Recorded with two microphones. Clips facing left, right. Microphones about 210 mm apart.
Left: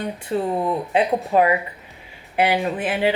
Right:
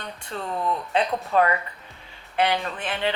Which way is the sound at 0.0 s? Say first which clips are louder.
Left 10 dB; 10° left (ahead or behind).